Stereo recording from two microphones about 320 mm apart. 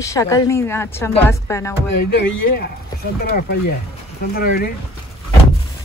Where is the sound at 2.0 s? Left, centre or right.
Left.